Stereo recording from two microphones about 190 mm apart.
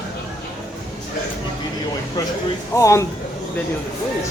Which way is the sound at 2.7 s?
15° left (ahead or behind).